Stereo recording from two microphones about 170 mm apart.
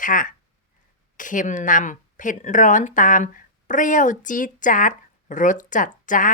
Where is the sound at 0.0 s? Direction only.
50° left (ahead or behind).